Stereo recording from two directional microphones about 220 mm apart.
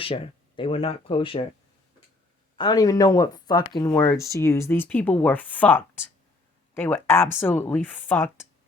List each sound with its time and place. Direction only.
0.0 s speech: 25° left (ahead or behind)
2.6 s speech: 15° left (ahead or behind)